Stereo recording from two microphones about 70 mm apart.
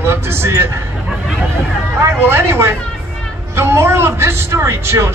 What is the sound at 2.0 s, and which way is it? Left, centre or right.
A man's voice, right.